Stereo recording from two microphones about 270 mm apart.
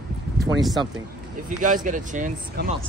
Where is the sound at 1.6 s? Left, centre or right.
Right.